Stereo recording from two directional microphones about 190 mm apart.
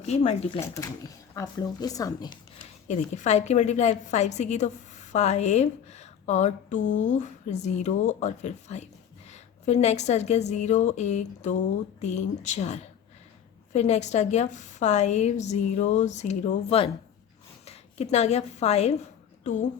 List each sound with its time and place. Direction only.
0.0 s a woman's voice: 35° left (ahead or behind)
0.6 s speech: 15° left (ahead or behind)
2.8 s a woman's voice: 40° left (ahead or behind)